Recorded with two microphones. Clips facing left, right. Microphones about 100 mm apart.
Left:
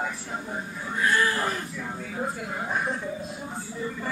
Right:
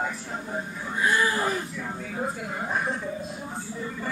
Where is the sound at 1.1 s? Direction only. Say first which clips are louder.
Right 1 dB; 10° right (ahead or behind).